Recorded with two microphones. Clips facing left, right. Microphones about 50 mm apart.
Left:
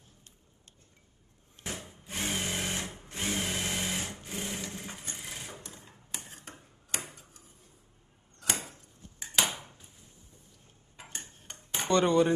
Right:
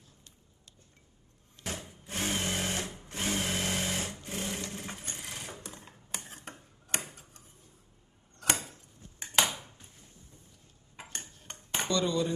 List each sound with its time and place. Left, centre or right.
1.6 s a sound: centre
2.7 s sewing machine: centre
3.2 s sewing machine: centre
5.9 s tick-tock: centre
8.5 s a sound: centre
11.1 s cutlery: centre
11.9 s speech: left